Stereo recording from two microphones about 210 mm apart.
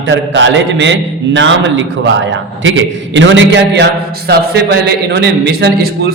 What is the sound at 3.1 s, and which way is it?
Speech, 60° right (ahead or behind).